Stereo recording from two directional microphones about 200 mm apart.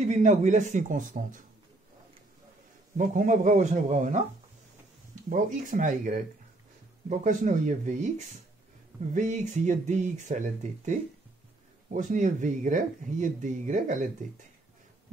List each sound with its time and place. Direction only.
0.0 s speech: 35° right (ahead or behind)
3.0 s speech: 40° right (ahead or behind)
5.3 s speech: 40° right (ahead or behind)